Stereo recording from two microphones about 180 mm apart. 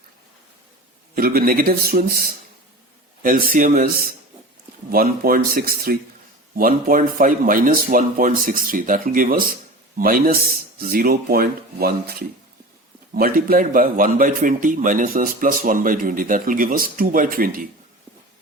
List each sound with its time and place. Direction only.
1.1 s a man's voice: 55° right (ahead or behind)
13.1 s a man's voice: 55° right (ahead or behind)